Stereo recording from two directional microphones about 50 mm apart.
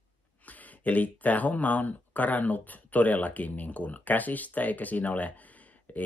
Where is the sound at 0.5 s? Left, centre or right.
Left.